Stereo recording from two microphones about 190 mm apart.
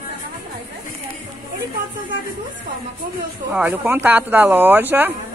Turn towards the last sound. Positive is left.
turn(degrees=-10)  # may be behind; listen again after turning